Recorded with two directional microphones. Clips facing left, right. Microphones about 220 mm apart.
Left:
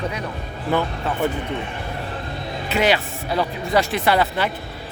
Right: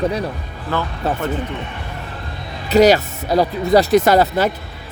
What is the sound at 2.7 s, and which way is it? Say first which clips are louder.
Speech: right 8 dB; 40° right (ahead or behind).